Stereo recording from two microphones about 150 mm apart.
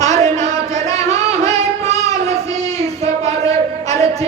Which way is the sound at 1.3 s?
45° right (ahead or behind).